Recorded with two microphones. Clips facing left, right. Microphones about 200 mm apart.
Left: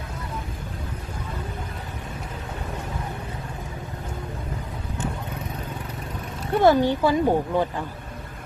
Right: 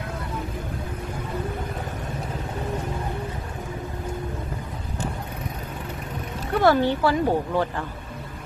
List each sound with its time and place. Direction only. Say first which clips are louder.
6.5 s speech: left 2 dB; 20° left (ahead or behind)